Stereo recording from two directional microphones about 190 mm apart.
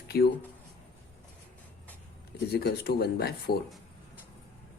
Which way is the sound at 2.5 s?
55° left (ahead or behind).